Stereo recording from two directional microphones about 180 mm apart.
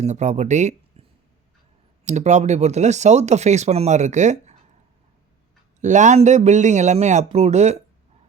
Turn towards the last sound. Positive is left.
turn(degrees=-40)  # may be behind; listen again after turning